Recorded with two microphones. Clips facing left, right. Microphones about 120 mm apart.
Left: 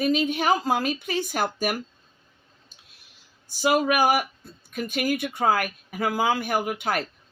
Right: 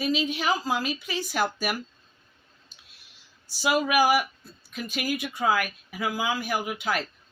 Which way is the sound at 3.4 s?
45° left (ahead or behind).